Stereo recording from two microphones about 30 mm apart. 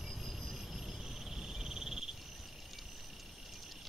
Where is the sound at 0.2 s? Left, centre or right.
Centre.